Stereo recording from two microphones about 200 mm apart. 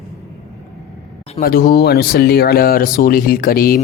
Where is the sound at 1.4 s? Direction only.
45° left (ahead or behind).